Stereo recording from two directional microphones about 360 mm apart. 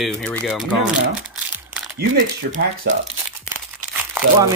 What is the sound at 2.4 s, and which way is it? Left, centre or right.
Speech, right.